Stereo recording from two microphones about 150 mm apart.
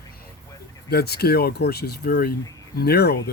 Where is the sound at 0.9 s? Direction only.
90° left.